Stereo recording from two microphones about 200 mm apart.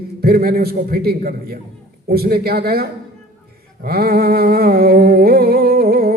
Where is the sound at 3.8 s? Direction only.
50° right (ahead or behind).